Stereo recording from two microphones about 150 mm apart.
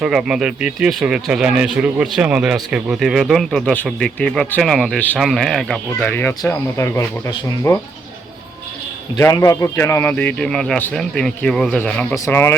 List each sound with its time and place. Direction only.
0.0 s speech: 5° right (ahead or behind)
6.0 s speech: 15° left (ahead or behind)
9.1 s speech: 20° left (ahead or behind)
12.1 s speech: 20° left (ahead or behind)